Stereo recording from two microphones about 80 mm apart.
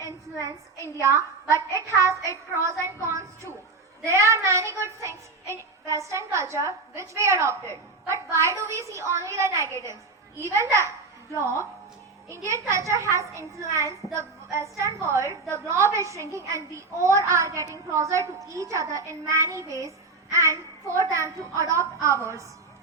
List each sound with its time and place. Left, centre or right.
0.0 s child singing: left
2.6 s a woman's voice: right